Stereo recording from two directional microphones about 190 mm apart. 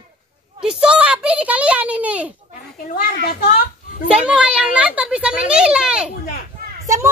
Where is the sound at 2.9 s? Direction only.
50° left (ahead or behind).